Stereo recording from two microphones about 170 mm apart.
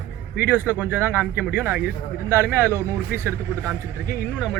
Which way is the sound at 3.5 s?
10° left (ahead or behind).